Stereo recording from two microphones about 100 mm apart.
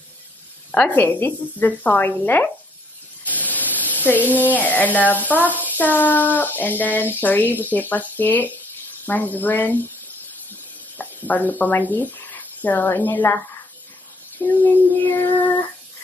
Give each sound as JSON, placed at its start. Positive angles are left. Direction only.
{"t": 0.7, "sound": "a woman's voice", "side_deg": 15}
{"t": 3.3, "sound": "a sound", "side_deg": 15}
{"t": 4.4, "sound": "speech", "side_deg": 15}
{"t": 11.0, "sound": "speech", "side_deg": 15}
{"t": 14.4, "sound": "a woman's voice", "side_deg": 20}